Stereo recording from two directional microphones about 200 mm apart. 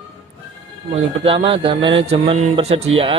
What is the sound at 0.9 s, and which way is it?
Speech, 30° right (ahead or behind).